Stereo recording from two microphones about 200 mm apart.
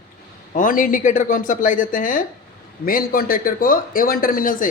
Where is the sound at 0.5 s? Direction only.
45° left (ahead or behind).